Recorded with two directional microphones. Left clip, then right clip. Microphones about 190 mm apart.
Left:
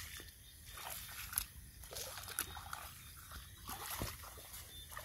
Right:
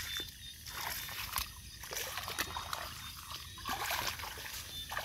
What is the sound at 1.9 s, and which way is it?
Trickle, 30° right (ahead or behind).